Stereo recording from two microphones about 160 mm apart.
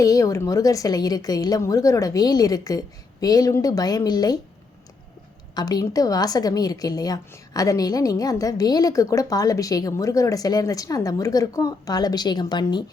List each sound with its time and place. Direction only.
0.0 s a woman's voice: 20° left (ahead or behind)
5.5 s a woman's voice: 25° left (ahead or behind)